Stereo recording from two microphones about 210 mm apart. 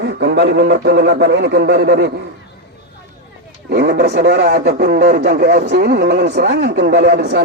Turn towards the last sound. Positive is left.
turn(degrees=-55)  # may be behind; listen again after turning